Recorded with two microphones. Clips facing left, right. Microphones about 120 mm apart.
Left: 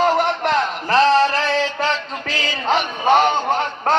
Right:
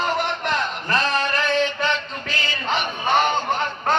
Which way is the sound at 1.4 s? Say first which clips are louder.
Left 1 dB; 90° left.